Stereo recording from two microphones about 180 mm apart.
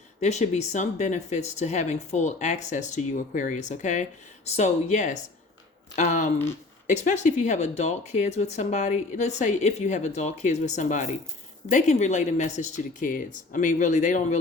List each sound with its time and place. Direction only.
0.2 s speech: 40° left (ahead or behind)